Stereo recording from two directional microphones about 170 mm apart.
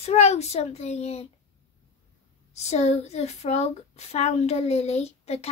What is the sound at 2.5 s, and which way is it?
A woman's voice, 40° left (ahead or behind).